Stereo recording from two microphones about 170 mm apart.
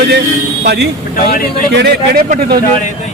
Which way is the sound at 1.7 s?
75° right (ahead or behind).